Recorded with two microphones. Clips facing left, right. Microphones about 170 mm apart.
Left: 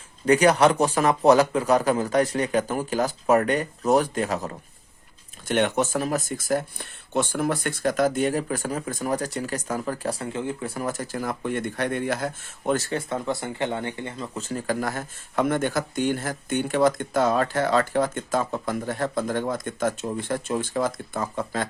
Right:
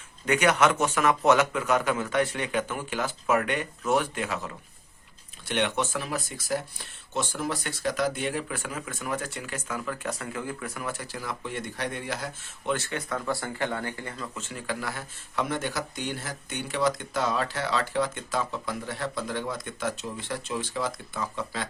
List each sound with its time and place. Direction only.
0.3 s speech: 35° left (ahead or behind)
14.3 s speech: 40° left (ahead or behind)